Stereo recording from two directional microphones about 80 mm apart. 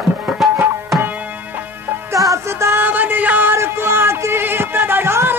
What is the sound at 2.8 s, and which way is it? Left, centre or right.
Music, right.